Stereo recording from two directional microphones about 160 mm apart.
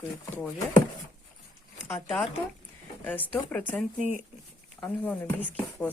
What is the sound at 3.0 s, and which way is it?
Speech, 10° left (ahead or behind).